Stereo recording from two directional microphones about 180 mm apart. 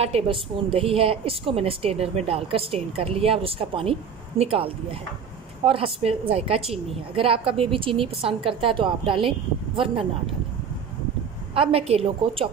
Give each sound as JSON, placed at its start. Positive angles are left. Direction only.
{"t": 0.0, "sound": "a woman's voice", "side_deg": -35}
{"t": 11.5, "sound": "a woman's voice", "side_deg": -30}